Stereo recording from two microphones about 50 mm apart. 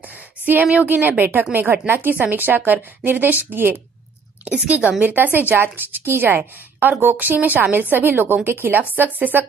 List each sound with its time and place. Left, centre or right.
0.5 s a woman's voice: right
4.6 s a woman's voice: right
5.1 s a woman's voice: right
5.6 s a woman's voice: right